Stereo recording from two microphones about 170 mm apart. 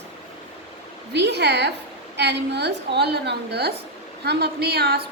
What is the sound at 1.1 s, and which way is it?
A woman's voice, 85° right.